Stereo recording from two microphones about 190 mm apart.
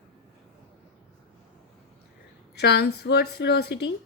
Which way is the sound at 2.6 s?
60° left (ahead or behind).